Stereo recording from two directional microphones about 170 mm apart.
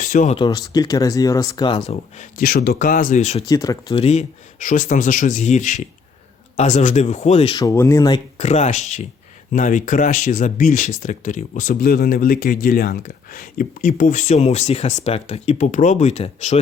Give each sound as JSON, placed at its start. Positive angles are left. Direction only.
{"t": 0.0, "sound": "speech", "side_deg": 45}
{"t": 0.3, "sound": "speech", "side_deg": 25}
{"t": 2.1, "sound": "a man's voice", "side_deg": 60}
{"t": 3.5, "sound": "speech", "side_deg": 20}
{"t": 4.0, "sound": "speech", "side_deg": 40}
{"t": 7.5, "sound": "speech", "side_deg": 20}
{"t": 8.4, "sound": "speech", "side_deg": 40}